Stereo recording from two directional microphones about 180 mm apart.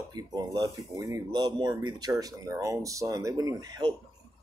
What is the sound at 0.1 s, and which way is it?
Speech, 20° right (ahead or behind).